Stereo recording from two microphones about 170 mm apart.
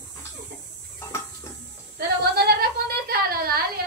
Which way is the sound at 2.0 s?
65° right (ahead or behind).